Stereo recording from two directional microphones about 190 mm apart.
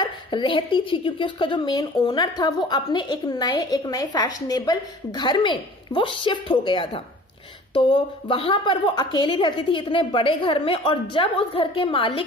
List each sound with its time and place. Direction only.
0.0 s a woman's voice: 25° left (ahead or behind)